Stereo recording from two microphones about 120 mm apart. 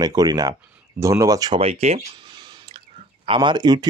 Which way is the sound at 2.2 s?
40° right (ahead or behind).